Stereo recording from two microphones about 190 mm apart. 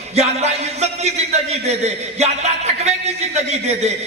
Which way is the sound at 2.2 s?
35° right (ahead or behind).